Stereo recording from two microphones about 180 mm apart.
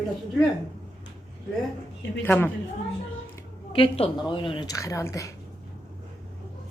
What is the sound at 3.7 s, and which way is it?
A woman's voice, 30° left (ahead or behind).